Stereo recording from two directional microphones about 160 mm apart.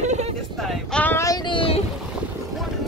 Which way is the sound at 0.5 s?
Centre (ahead or behind).